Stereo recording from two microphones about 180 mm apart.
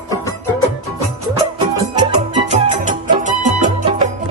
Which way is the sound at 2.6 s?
45° right (ahead or behind).